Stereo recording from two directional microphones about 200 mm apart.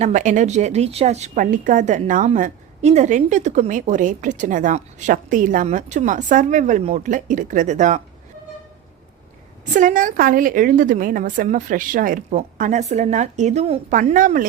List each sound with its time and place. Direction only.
0.0 s a woman's voice: 40° right (ahead or behind)
9.7 s a woman's voice: 40° right (ahead or behind)